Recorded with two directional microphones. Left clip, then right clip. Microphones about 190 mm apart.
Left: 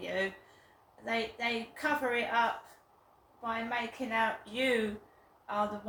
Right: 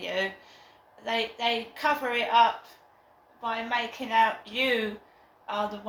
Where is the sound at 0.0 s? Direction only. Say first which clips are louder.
Right 4 dB; 20° left (ahead or behind).